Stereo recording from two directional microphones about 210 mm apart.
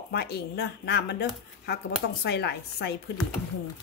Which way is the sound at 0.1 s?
50° left (ahead or behind).